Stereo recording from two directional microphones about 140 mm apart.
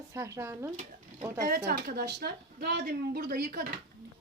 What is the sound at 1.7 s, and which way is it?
Speech, 90° right.